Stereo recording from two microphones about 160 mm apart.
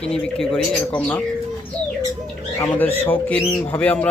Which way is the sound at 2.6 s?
10° left (ahead or behind).